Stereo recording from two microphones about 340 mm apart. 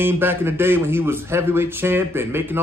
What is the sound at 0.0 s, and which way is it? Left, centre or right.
Speech, centre.